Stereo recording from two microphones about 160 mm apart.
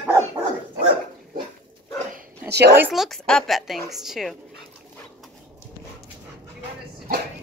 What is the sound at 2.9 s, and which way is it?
Speech, centre (ahead or behind).